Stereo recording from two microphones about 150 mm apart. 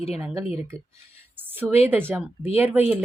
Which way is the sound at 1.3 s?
15° right (ahead or behind).